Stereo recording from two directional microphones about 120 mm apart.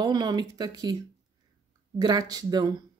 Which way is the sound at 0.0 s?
35° right (ahead or behind).